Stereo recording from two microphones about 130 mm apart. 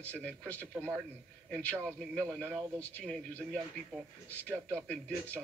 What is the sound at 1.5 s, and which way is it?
A man's voice, 10° left (ahead or behind).